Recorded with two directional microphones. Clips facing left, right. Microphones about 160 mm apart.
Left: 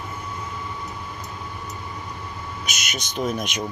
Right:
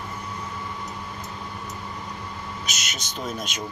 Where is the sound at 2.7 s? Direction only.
10° left (ahead or behind).